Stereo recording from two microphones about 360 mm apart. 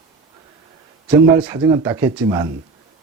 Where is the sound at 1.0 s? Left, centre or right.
Centre.